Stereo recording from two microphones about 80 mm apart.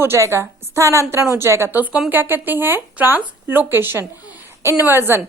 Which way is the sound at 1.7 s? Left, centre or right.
Centre.